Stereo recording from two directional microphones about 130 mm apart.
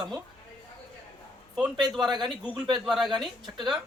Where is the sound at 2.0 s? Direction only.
35° right (ahead or behind).